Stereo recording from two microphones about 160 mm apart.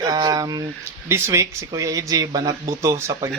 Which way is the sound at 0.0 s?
25° right (ahead or behind).